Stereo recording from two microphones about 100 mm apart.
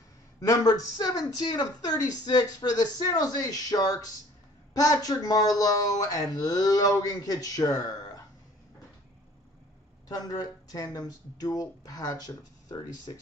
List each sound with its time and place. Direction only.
0.4 s speech: 35° left (ahead or behind)
10.0 s speech: 40° left (ahead or behind)